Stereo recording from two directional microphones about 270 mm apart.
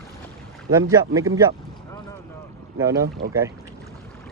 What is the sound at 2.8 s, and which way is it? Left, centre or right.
Speech, centre.